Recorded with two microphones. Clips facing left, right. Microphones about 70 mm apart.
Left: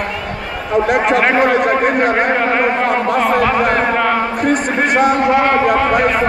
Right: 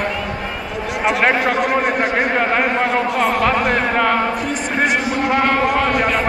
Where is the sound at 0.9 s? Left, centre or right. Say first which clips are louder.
Left 3 dB; left.